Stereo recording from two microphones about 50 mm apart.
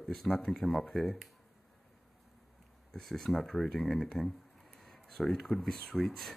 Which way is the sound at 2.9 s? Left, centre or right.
Centre.